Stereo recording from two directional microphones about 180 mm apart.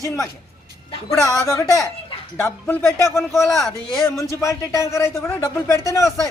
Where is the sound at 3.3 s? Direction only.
Centre (ahead or behind).